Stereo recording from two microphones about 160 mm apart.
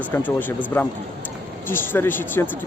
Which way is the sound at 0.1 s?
10° left (ahead or behind).